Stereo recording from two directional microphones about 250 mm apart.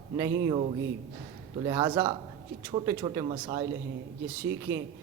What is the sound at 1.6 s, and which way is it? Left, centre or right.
Speech, centre.